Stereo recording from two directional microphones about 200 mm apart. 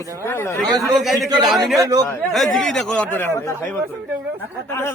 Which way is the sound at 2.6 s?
Centre (ahead or behind).